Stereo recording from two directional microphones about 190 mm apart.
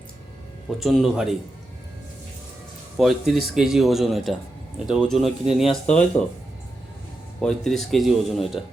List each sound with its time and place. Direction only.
0.8 s speech: centre (ahead or behind)
3.0 s speech: centre (ahead or behind)
7.4 s speech: centre (ahead or behind)